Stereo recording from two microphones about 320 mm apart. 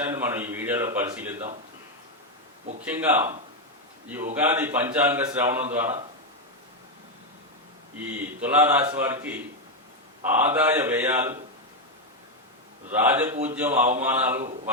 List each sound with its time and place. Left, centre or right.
0.0 s speech: centre
2.8 s speech: centre
4.4 s speech: centre
7.9 s a man's voice: centre
12.9 s a man's voice: centre